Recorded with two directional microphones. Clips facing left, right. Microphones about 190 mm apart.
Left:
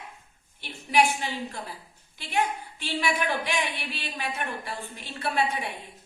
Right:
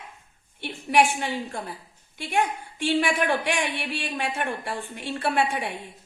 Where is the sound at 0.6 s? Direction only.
60° right (ahead or behind).